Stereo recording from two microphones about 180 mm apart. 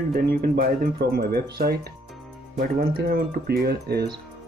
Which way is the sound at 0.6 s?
60° right (ahead or behind).